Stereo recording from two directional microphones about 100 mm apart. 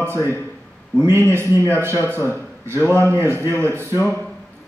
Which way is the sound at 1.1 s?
25° right (ahead or behind).